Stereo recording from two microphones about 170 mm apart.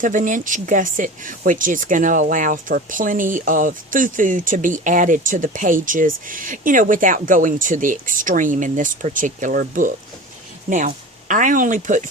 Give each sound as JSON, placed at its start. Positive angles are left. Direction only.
{"t": 0.0, "sound": "speech", "side_deg": -50}